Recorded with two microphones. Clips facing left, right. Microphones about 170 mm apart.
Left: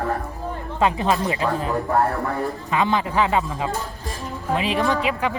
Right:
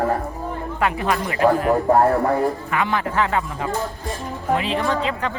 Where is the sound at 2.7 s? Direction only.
20° left (ahead or behind).